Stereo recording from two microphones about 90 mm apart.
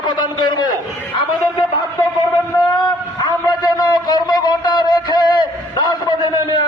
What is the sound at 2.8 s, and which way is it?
A man's voice, 50° left (ahead or behind).